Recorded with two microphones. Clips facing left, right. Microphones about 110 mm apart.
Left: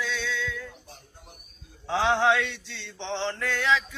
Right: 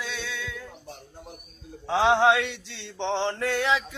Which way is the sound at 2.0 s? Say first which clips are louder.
Right 3 dB; 20° right (ahead or behind).